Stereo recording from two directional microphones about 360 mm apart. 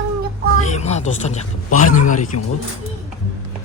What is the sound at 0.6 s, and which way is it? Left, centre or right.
Speech, centre.